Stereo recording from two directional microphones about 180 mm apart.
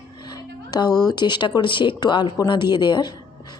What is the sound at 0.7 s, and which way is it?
Speech, 20° left (ahead or behind).